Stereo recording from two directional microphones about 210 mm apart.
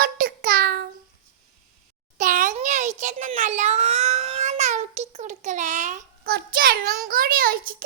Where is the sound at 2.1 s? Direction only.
35° right (ahead or behind).